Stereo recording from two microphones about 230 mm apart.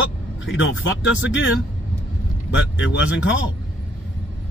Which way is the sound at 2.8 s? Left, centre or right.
Left.